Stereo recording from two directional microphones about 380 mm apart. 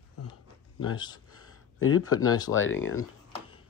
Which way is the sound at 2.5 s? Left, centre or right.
Left.